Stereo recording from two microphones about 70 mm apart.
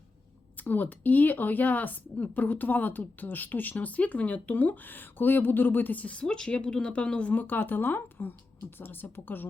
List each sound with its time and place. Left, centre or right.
0.5 s speech: left